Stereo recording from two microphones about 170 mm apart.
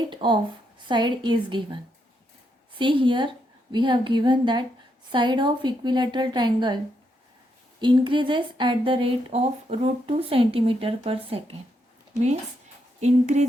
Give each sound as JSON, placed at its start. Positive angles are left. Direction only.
{"t": 0.1, "sound": "a woman's voice", "side_deg": -30}
{"t": 7.8, "sound": "speech", "side_deg": -25}
{"t": 13.0, "sound": "speech", "side_deg": -40}